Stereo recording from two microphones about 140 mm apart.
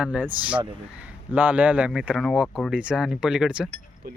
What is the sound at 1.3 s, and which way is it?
Cutlery, 10° right (ahead or behind).